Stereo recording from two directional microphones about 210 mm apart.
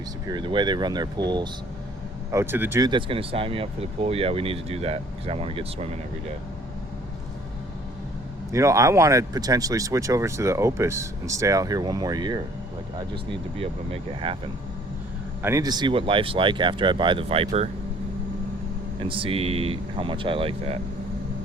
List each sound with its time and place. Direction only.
0.3 s speech: 20° right (ahead or behind)
2.3 s speech: 10° right (ahead or behind); by 6.0 s 30° right (ahead or behind)
8.5 s speech: 15° right (ahead or behind)
15.4 s speech: 15° right (ahead or behind); by 17.7 s 30° right (ahead or behind)
18.9 s speech: 25° right (ahead or behind)